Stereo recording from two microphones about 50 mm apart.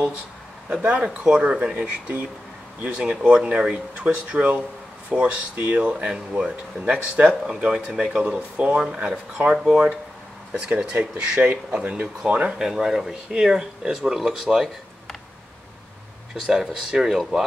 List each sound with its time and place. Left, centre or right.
0.9 s speech: right
12.5 s speech: centre
16.4 s speech: centre